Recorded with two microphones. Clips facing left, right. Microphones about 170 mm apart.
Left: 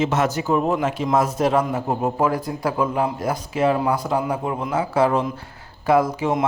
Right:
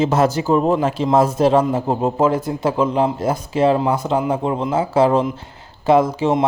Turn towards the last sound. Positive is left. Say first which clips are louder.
# right 4 dB
turn(degrees=-25)  # may be behind; listen again after turning